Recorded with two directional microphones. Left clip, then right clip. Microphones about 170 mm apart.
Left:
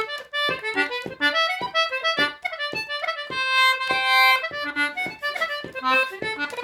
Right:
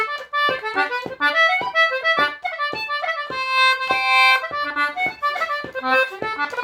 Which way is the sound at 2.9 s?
5° right (ahead or behind).